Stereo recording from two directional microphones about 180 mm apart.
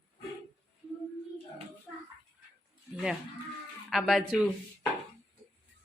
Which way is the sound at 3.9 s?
Centre (ahead or behind).